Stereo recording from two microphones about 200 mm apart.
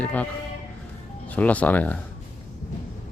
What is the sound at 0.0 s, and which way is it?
Speech, 5° left (ahead or behind).